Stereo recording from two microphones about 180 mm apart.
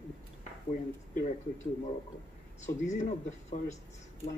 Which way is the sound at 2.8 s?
40° left (ahead or behind).